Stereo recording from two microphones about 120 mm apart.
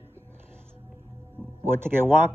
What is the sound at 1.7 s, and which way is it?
Speech, 20° right (ahead or behind).